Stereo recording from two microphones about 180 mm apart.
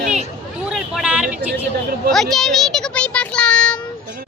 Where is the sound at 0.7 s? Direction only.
5° right (ahead or behind).